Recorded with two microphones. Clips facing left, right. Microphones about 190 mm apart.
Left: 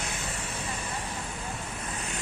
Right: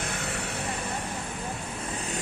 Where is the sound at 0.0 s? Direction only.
60° right (ahead or behind).